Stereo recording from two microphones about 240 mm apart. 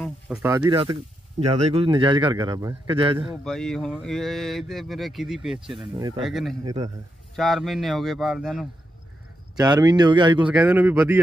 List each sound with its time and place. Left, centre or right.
0.0 s speech: centre
0.7 s a man's voice: centre
3.4 s speech: centre
5.9 s speech: centre
6.2 s speech: centre
6.6 s speech: centre
7.3 s speech: centre
9.6 s speech: centre
10.5 s speech: centre